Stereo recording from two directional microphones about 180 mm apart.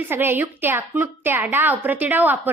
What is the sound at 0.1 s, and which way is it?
A woman's voice, 10° right (ahead or behind).